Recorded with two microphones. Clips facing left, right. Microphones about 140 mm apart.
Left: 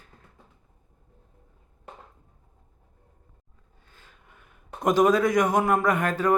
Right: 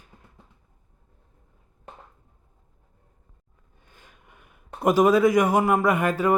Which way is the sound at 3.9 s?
15° right (ahead or behind).